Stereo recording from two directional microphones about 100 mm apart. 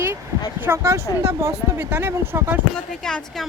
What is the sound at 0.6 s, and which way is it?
Speech, 25° right (ahead or behind).